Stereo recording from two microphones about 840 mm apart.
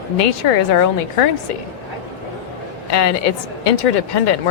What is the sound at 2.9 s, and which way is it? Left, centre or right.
A woman's voice, left.